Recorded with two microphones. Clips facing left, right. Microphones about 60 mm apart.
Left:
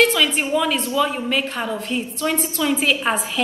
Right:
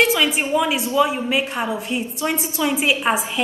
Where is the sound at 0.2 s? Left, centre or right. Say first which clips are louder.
Even; centre.